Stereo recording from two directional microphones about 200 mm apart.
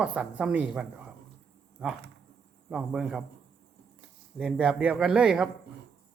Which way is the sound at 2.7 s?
5° right (ahead or behind).